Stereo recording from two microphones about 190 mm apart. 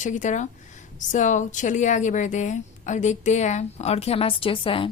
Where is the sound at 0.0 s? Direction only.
40° left (ahead or behind).